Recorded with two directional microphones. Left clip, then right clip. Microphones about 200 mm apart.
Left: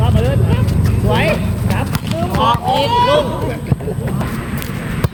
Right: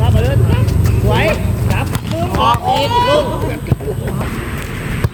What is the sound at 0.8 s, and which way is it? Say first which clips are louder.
Clip-clop: right 1 dB; 10° right (ahead or behind).